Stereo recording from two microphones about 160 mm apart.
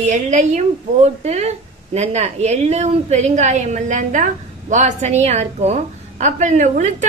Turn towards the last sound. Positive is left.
turn(degrees=-50)  # may be behind; listen again after turning